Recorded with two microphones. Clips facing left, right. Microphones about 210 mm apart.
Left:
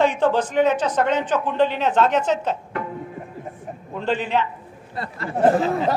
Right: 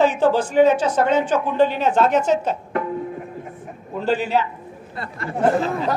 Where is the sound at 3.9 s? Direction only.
5° right (ahead or behind).